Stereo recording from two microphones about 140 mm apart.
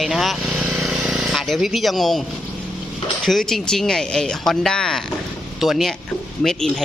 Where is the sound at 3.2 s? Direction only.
Centre (ahead or behind).